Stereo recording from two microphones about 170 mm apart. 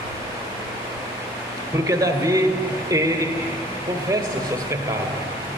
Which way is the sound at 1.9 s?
20° right (ahead or behind).